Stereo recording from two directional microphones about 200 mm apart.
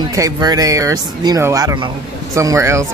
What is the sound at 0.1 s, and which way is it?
Speech, 20° right (ahead or behind).